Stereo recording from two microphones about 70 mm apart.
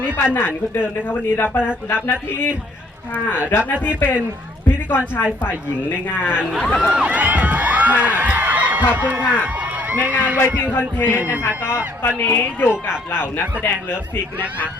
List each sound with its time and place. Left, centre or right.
0.3 s a woman's voice: left
6.4 s speech: centre
6.9 s a sound: centre
9.2 s a man's voice: centre
10.7 s a woman's voice: left